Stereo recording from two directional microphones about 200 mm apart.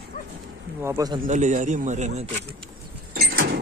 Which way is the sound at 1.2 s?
40° right (ahead or behind).